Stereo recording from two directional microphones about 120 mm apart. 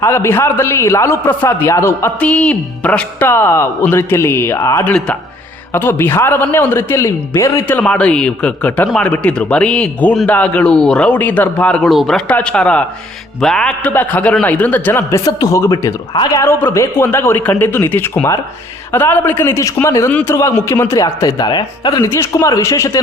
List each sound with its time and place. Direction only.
0.0 s a man's voice: 20° left (ahead or behind)
4.9 s a man's voice: 5° left (ahead or behind)
5.7 s a man's voice: 20° left (ahead or behind)
7.8 s a man's voice: 10° left (ahead or behind)
16.1 s a man's voice: 35° left (ahead or behind)
16.4 s a man's voice: 20° left (ahead or behind); by 22.0 s 35° left (ahead or behind)
22.0 s a man's voice: 25° left (ahead or behind)